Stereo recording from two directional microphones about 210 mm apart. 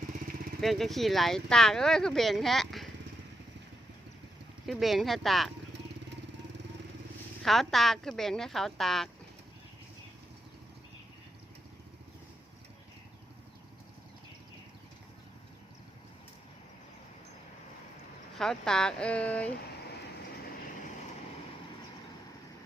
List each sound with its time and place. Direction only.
0.6 s speech: centre (ahead or behind)
4.6 s speech: centre (ahead or behind)
7.4 s speech: centre (ahead or behind)
18.3 s speech: 5° left (ahead or behind)
20.4 s vehicle: 45° left (ahead or behind)